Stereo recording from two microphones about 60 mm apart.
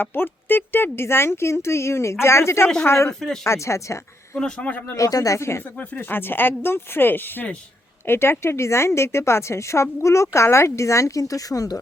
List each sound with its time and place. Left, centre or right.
0.0 s a woman's voice: left
3.1 s a man's voice: centre
3.4 s a woman's voice: left
4.4 s a man's voice: centre
4.9 s speech: left
5.4 s a woman's voice: left
5.9 s a woman's voice: left